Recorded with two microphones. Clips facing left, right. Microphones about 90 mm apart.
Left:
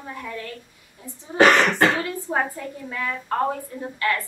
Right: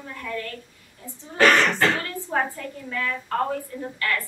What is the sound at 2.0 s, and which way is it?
A woman's voice, 15° left (ahead or behind).